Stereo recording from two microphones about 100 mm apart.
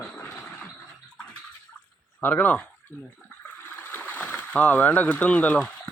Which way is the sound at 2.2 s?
15° left (ahead or behind).